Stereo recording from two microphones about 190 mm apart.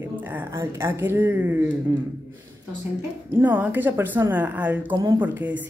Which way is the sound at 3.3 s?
10° right (ahead or behind).